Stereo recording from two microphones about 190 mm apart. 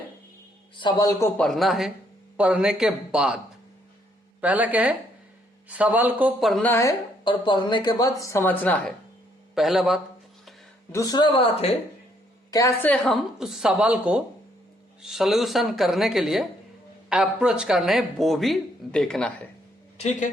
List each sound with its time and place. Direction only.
0.8 s speech: 20° left (ahead or behind)
1.4 s speech: centre (ahead or behind)
7.3 s speech: 25° left (ahead or behind); by 8.8 s 10° left (ahead or behind)
9.6 s speech: centre (ahead or behind)
10.9 s speech: 20° left (ahead or behind)
12.5 s speech: 15° left (ahead or behind)
20.0 s speech: 40° left (ahead or behind)